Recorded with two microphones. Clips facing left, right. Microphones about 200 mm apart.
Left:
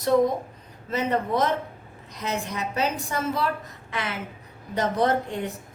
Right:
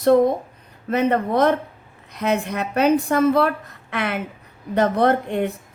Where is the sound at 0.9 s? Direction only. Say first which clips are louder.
Right 6 dB; 60° right (ahead or behind).